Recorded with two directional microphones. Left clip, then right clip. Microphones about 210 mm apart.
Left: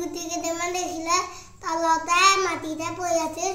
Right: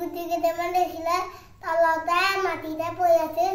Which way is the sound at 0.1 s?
15° right (ahead or behind).